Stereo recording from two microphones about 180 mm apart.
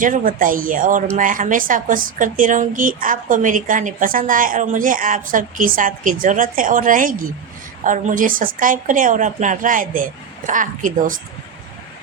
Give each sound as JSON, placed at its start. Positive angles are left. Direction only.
{"t": 0.0, "sound": "a woman's voice", "side_deg": -50}